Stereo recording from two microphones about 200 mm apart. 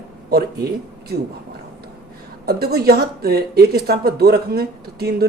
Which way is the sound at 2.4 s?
50° right (ahead or behind).